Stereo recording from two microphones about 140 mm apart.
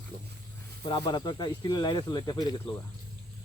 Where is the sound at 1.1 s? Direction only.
30° left (ahead or behind).